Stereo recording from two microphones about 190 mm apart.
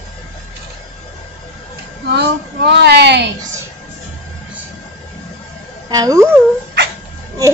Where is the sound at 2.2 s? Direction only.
65° right (ahead or behind).